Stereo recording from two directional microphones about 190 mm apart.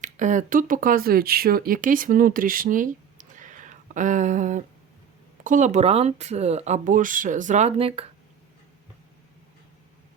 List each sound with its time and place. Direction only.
0.0 s speech: 40° right (ahead or behind)